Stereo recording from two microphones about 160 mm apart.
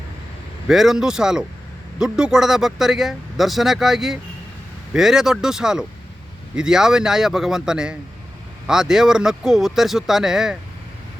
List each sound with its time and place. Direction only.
0.7 s speech: centre (ahead or behind)